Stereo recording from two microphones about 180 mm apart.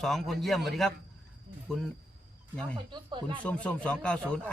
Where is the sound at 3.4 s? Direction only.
5° left (ahead or behind).